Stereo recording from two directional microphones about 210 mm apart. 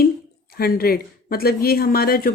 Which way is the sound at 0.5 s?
45° left (ahead or behind).